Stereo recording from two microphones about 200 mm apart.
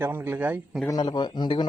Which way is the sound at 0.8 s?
20° left (ahead or behind).